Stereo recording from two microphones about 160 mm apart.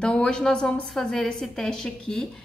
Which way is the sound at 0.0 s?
5° left (ahead or behind).